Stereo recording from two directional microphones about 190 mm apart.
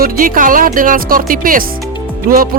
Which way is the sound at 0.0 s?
45° right (ahead or behind).